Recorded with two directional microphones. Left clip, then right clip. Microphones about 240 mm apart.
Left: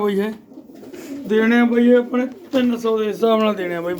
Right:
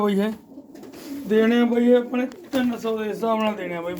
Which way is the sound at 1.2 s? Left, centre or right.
Left.